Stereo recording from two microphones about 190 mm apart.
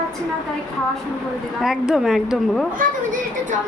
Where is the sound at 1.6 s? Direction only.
Centre (ahead or behind).